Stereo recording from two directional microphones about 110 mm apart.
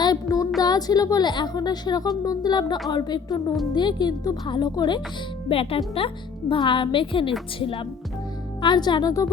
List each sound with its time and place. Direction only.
0.0 s music: 35° left (ahead or behind)
0.6 s a woman's voice: 35° left (ahead or behind)
5.5 s a woman's voice: 60° left (ahead or behind)
8.6 s a woman's voice: 40° left (ahead or behind)